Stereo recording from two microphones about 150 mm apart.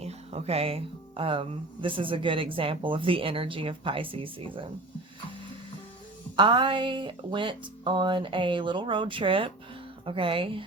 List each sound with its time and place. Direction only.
0.0 s speech: 45° right (ahead or behind)
6.3 s speech: 30° right (ahead or behind)